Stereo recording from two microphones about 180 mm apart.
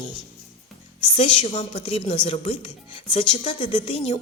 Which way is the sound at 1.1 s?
30° left (ahead or behind).